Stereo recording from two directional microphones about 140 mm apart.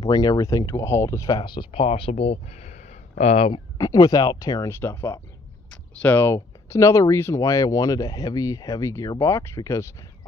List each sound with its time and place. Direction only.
0.0 s speech: 25° left (ahead or behind)
1.4 s speech: 35° left (ahead or behind)
3.7 s speech: 25° left (ahead or behind)